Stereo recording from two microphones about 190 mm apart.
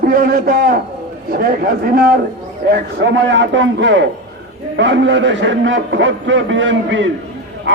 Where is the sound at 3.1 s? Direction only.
75° right (ahead or behind).